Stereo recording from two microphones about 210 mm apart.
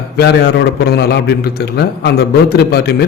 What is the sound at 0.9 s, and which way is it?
A man's voice, 50° left (ahead or behind).